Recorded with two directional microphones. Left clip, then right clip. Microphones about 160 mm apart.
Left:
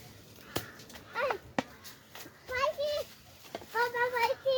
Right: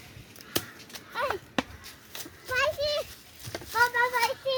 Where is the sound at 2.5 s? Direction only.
90° right.